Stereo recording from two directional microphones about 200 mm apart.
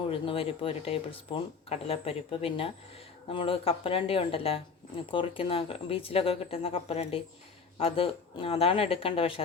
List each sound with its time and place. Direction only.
0.1 s speech: 25° left (ahead or behind)